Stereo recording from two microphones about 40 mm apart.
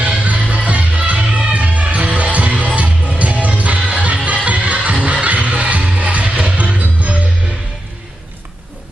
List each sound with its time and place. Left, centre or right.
0.0 s music: right